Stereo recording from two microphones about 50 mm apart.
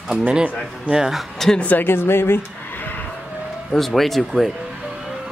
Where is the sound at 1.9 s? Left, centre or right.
Left.